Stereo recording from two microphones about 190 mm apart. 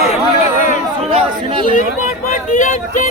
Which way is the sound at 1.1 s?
25° right (ahead or behind).